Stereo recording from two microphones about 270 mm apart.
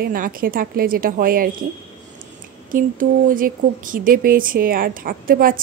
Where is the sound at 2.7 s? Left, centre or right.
Right.